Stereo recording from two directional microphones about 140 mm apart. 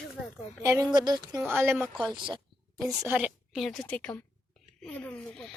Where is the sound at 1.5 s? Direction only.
15° right (ahead or behind).